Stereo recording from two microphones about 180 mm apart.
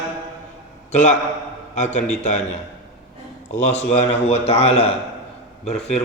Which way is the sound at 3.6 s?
40° left (ahead or behind).